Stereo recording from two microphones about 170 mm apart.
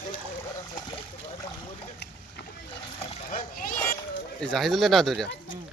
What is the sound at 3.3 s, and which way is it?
Splash, 55° left (ahead or behind).